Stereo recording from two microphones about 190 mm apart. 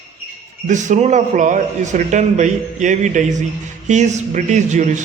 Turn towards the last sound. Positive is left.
turn(degrees=-40)  # may be behind; listen again after turning